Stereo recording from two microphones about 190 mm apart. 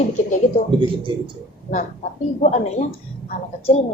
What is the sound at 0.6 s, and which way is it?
Speech, 40° left (ahead or behind).